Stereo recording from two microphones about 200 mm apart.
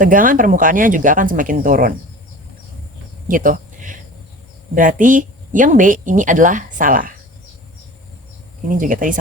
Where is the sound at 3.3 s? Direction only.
45° right (ahead or behind).